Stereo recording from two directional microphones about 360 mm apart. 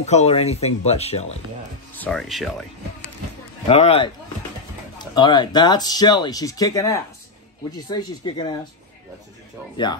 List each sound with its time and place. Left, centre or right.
0.0 s speech: centre
2.0 s speech: centre
3.6 s speech: centre